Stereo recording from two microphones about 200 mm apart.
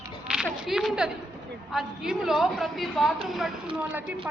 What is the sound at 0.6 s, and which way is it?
A woman's voice, centre (ahead or behind).